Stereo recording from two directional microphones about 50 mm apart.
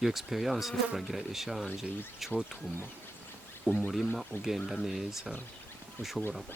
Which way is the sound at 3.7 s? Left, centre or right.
Right.